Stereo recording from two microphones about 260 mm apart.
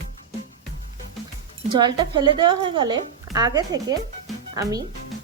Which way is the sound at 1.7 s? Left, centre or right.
Centre.